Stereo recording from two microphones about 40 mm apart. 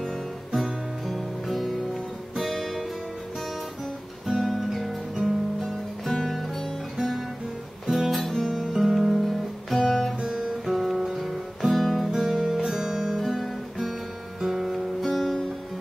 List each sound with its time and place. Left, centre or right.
0.6 s music: centre
4.3 s music: centre
7.8 s music: centre
8.1 s music: centre
9.1 s guitar: centre
10.2 s guitar: centre
10.6 s music: centre
12.3 s music: centre
13.2 s guitar: centre
14.4 s music: centre